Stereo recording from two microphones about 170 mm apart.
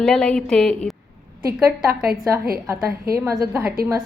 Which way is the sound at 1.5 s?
10° right (ahead or behind).